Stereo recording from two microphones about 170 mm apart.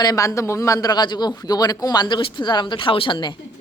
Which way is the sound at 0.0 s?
20° left (ahead or behind).